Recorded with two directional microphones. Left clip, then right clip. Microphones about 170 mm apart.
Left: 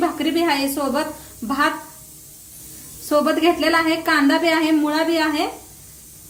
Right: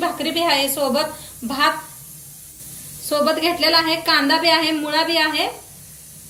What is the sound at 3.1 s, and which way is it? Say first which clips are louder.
A woman's voice: left 1 dB; 45° left (ahead or behind).